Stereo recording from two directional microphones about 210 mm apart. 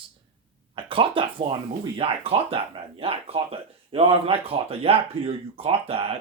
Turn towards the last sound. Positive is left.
turn(degrees=-25)  # may be behind; listen again after turning